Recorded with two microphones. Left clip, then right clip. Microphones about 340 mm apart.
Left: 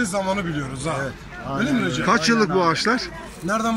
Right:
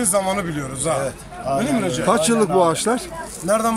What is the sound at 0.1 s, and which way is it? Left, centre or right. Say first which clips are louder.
A man's voice: right 3 dB; centre.